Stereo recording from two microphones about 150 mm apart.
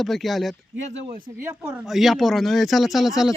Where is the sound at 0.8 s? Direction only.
50° right (ahead or behind).